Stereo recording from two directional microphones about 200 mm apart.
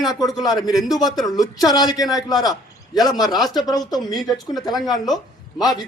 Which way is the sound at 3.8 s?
20° left (ahead or behind).